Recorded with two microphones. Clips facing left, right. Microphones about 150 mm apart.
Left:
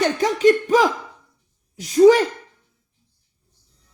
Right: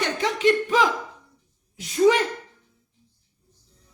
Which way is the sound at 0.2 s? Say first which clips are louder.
Left 3 dB; 40° left (ahead or behind).